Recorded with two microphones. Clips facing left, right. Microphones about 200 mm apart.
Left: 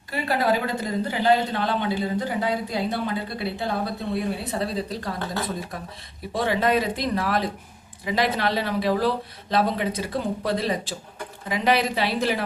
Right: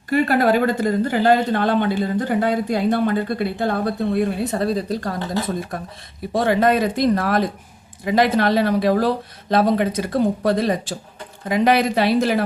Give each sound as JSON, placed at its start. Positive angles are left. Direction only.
{"t": 0.1, "sound": "speech", "side_deg": -55}
{"t": 6.3, "sound": "speech", "side_deg": -45}